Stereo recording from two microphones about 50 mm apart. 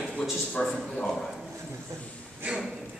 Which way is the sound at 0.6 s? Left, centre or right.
Centre.